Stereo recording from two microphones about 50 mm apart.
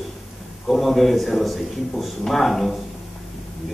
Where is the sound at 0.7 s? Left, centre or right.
Centre.